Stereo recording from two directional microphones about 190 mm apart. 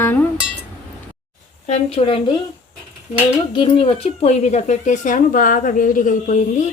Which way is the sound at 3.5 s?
30° left (ahead or behind).